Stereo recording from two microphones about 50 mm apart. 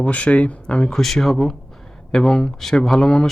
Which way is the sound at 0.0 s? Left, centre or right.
Left.